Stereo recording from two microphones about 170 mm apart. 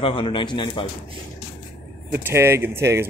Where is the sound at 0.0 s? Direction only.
30° left (ahead or behind).